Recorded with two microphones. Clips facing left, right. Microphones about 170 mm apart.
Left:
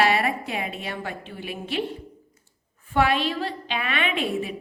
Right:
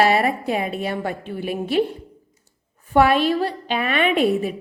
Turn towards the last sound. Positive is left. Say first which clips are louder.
# right 8 dB
turn(degrees=-40)  # may be behind; listen again after turning